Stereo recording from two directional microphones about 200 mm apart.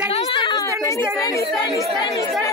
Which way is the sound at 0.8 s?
15° left (ahead or behind).